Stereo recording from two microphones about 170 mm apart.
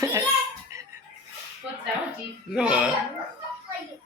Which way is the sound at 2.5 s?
5° right (ahead or behind).